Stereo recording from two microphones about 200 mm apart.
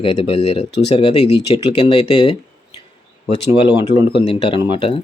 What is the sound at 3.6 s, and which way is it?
Speech, 25° left (ahead or behind).